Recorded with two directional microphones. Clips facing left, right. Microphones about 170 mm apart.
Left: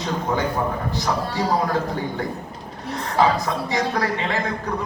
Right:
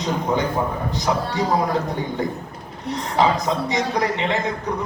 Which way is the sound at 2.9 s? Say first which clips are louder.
Even; 20° right (ahead or behind).